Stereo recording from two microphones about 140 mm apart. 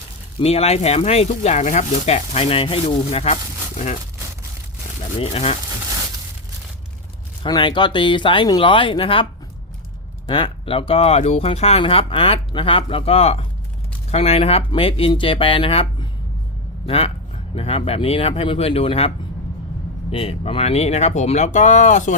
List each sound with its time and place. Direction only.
0.3 s speech: 45° left (ahead or behind)
5.2 s speech: 45° left (ahead or behind)
7.4 s speech: 35° left (ahead or behind)
10.2 s speech: 40° left (ahead or behind); by 22.1 s 60° left (ahead or behind)